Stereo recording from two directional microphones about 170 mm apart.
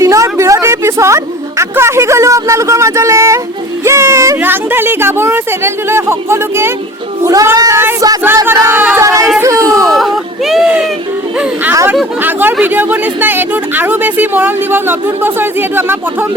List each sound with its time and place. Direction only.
0.0 s a sound: 20° right (ahead or behind)
3.8 s speech: 15° right (ahead or behind)
9.4 s chatter: 20° right (ahead or behind)
9.9 s a sound: centre (ahead or behind)
11.3 s chatter: 15° right (ahead or behind)
12.2 s speech: 10° right (ahead or behind)